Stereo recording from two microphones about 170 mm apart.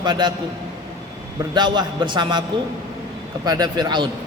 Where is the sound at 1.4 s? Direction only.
25° right (ahead or behind).